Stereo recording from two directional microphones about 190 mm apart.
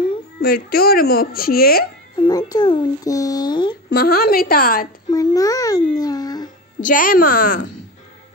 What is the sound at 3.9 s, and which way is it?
Speech, 55° left (ahead or behind).